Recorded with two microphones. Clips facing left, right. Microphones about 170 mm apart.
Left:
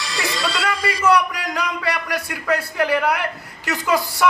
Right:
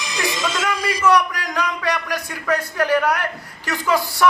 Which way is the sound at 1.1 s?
5° left (ahead or behind).